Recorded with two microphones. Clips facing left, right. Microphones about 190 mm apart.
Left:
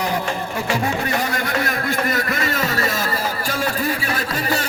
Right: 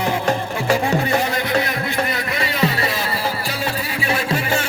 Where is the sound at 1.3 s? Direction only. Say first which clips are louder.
Right 2 dB; 45° left (ahead or behind).